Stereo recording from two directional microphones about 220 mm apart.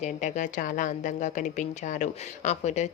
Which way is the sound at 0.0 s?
35° left (ahead or behind).